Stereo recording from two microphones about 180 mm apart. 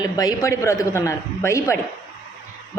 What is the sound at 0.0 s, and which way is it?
A woman's voice, 20° left (ahead or behind).